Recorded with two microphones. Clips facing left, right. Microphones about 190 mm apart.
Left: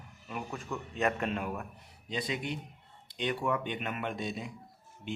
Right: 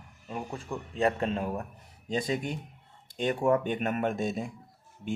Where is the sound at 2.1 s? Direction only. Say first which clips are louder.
Right 5 dB; 45° right (ahead or behind).